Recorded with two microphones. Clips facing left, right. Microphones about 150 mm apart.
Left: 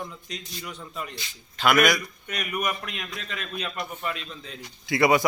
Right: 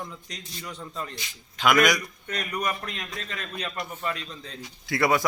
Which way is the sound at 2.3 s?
20° left (ahead or behind).